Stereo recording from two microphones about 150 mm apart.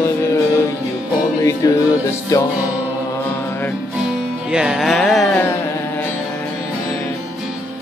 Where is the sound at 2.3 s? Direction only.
20° left (ahead or behind).